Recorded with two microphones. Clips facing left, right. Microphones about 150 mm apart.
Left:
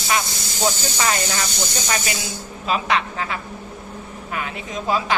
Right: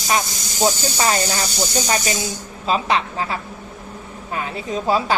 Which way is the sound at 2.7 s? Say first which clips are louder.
Right 2 dB; 30° right (ahead or behind).